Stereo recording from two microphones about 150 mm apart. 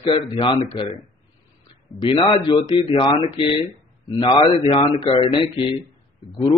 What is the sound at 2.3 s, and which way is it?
Speech, 30° left (ahead or behind).